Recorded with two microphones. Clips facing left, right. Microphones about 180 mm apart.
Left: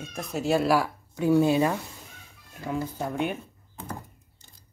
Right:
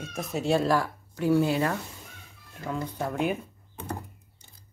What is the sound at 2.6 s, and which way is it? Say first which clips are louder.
Speech: left 1 dB; 5° left (ahead or behind).